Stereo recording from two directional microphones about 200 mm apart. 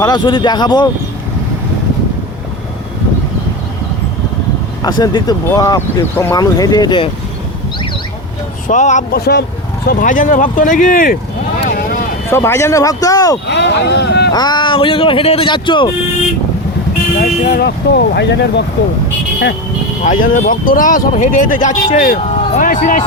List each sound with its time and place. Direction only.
0.0 s speech: 20° left (ahead or behind)
4.8 s speech: 20° left (ahead or behind)
8.6 s speech: 35° left (ahead or behind)
9.1 s speech: 55° left (ahead or behind)
9.8 s speech: 45° left (ahead or behind)
11.7 s vehicle: 45° left (ahead or behind)
12.3 s speech: 15° left (ahead or behind)
13.5 s speech: 55° left (ahead or behind)
14.3 s speech: 20° left (ahead or behind)
17.2 s speech: 45° left (ahead or behind)
20.1 s a man's voice: 40° left (ahead or behind)